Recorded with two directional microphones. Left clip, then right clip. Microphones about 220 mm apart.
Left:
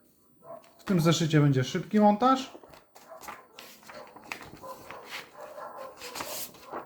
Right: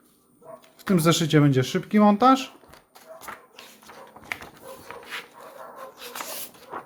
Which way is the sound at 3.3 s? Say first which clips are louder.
Right 4 dB; 20° right (ahead or behind).